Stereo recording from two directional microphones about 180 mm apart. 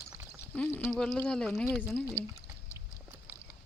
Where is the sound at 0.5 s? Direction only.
15° left (ahead or behind).